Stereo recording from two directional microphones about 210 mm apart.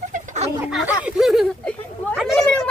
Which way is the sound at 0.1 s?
35° right (ahead or behind).